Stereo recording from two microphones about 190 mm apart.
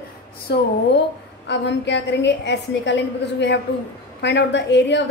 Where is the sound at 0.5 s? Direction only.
60° left (ahead or behind).